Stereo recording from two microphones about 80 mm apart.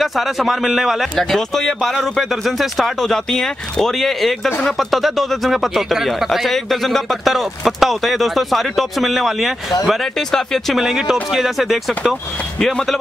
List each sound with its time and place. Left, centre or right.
0.0 s a man's voice: centre